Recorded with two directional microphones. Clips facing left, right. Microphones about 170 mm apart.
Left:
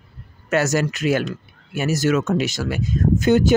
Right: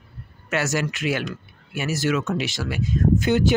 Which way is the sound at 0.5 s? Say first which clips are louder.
Left 5 dB; 40° left (ahead or behind).